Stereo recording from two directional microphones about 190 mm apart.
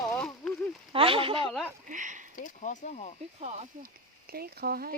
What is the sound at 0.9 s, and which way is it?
Speech, 30° right (ahead or behind).